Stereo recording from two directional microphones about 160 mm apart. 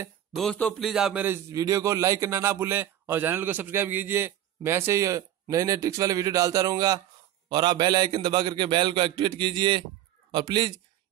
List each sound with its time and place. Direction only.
0.4 s a man's voice: 5° left (ahead or behind); by 10.8 s 30° right (ahead or behind)